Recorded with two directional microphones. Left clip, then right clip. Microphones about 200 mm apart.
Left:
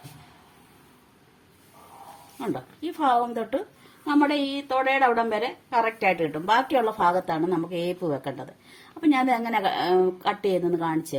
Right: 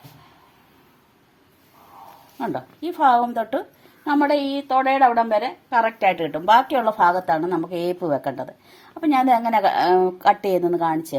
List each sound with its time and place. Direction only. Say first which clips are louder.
2.4 s a woman's voice: right 4 dB; 45° right (ahead or behind)